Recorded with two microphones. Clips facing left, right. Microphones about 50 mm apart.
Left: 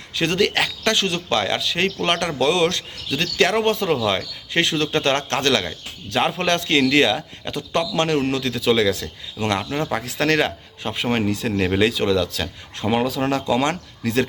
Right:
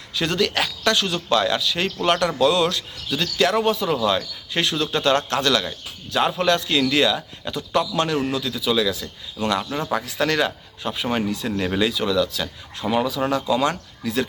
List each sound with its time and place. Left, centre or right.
0.2 s a man's voice: left
3.9 s speech: left
6.5 s a man's voice: left
9.4 s a man's voice: left